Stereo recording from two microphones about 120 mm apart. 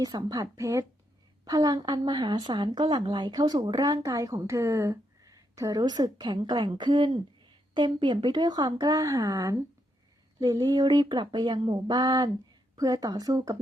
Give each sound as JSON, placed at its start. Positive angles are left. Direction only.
{"t": 0.0, "sound": "a woman's voice", "side_deg": -35}